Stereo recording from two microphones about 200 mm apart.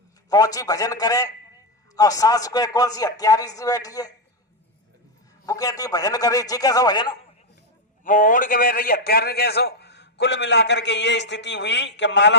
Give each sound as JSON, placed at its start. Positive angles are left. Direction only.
{"t": 0.3, "sound": "a man's voice", "side_deg": 20}
{"t": 5.5, "sound": "a man's voice", "side_deg": 15}
{"t": 8.0, "sound": "a man's voice", "side_deg": 40}